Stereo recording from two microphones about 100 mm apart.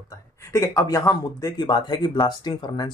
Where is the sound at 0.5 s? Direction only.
30° left (ahead or behind).